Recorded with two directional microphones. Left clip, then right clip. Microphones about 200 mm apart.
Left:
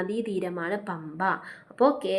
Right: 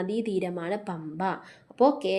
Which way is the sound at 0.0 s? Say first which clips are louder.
Even; 40° right (ahead or behind).